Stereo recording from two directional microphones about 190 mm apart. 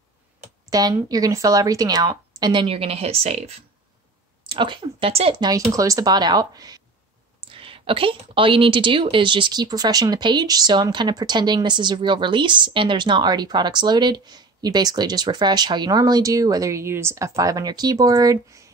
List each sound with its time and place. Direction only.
0.7 s a woman's voice: 20° right (ahead or behind)
5.4 s a woman's voice: 20° right (ahead or behind)